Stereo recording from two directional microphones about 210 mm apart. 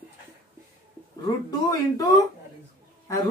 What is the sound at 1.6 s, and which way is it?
Speech, 15° left (ahead or behind).